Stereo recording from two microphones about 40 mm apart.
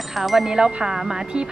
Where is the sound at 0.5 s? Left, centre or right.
Right.